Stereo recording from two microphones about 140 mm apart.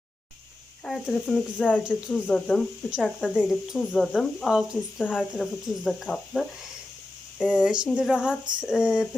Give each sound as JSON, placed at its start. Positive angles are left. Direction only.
{"t": 0.9, "sound": "speech", "side_deg": 0}
{"t": 1.8, "sound": "speech", "side_deg": -5}
{"t": 2.3, "sound": "speech", "side_deg": 5}
{"t": 7.6, "sound": "speech", "side_deg": -5}